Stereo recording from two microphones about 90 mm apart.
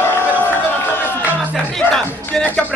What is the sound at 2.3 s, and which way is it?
Music, 10° left (ahead or behind).